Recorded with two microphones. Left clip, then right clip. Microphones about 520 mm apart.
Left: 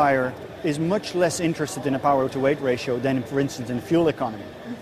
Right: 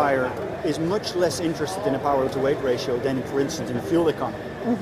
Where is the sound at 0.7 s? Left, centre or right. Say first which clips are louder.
Left 1 dB; left.